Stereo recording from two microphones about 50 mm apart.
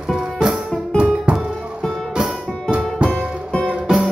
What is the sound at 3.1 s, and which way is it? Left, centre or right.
Music, centre.